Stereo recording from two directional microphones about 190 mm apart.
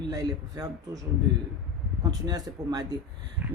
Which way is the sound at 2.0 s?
20° right (ahead or behind).